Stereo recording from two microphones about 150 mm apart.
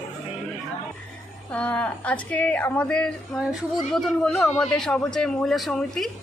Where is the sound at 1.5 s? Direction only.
10° left (ahead or behind).